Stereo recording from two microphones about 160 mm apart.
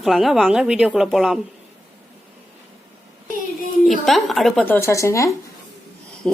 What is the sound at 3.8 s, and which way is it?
Speech, centre (ahead or behind).